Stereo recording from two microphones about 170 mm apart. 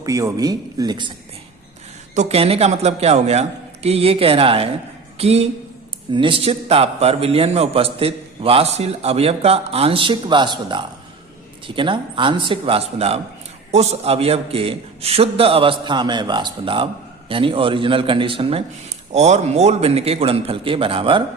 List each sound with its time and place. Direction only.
0.0 s speech: 20° right (ahead or behind)
2.1 s a man's voice: 35° right (ahead or behind)